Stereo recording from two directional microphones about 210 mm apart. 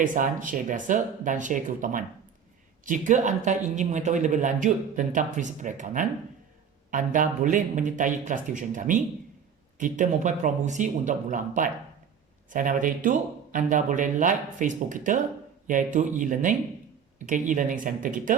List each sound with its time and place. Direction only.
0.0 s speech: 40° right (ahead or behind)